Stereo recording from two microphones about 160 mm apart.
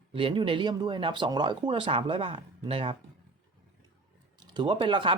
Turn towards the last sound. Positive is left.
turn(degrees=-30)  # may be behind; listen again after turning